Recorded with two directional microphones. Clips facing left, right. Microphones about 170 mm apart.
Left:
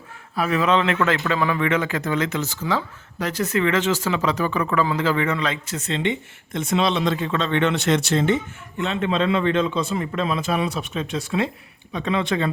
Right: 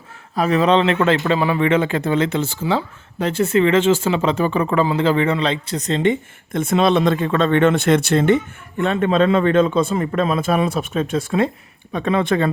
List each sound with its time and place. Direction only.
0.3 s speech: 35° right (ahead or behind); by 12.5 s 50° right (ahead or behind)